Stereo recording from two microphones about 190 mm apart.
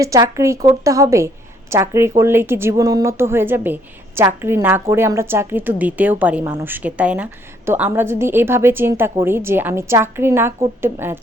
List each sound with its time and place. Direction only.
0.0 s a woman's voice: 15° right (ahead or behind)